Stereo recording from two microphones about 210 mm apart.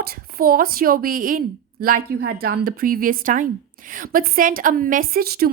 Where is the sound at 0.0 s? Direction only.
45° right (ahead or behind).